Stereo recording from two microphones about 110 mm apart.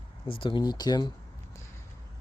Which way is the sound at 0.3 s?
50° left (ahead or behind).